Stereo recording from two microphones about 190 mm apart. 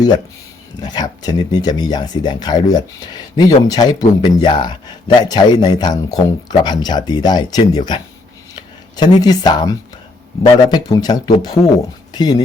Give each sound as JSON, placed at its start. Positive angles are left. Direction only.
{"t": 0.8, "sound": "speech", "side_deg": 20}